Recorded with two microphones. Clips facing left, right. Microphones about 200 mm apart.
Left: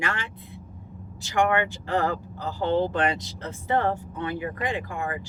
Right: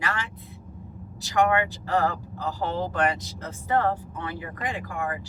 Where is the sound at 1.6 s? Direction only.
25° left (ahead or behind).